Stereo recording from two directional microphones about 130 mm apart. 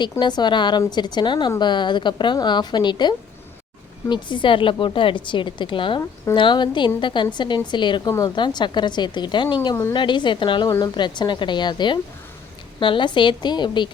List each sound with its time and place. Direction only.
0.0 s a woman's voice: 35° left (ahead or behind)